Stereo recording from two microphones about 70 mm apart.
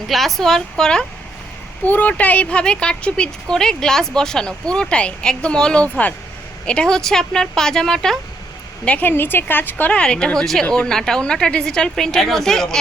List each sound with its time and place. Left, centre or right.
0.1 s speech: centre
1.8 s a woman's voice: left; by 8.2 s centre
8.8 s a woman's voice: centre
9.0 s speech: left
9.9 s a woman's voice: centre